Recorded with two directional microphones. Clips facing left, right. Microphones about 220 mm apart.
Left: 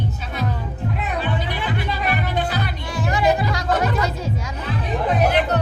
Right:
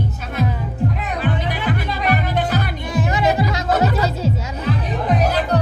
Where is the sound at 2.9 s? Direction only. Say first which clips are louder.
Right 1 dB; 20° right (ahead or behind).